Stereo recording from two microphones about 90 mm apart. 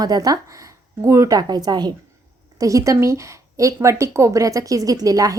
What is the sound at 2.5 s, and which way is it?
A woman's voice, 40° right (ahead or behind).